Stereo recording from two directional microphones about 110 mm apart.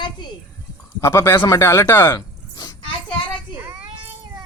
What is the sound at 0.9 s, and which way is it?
Speech, 25° left (ahead or behind).